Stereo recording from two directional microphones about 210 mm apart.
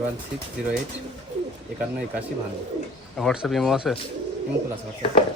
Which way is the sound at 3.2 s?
Centre (ahead or behind).